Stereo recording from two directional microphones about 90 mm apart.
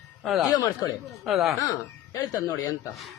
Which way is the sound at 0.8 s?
45° left (ahead or behind).